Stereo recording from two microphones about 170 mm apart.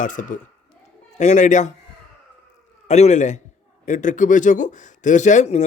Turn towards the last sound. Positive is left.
turn(degrees=45)  # may be behind; listen again after turning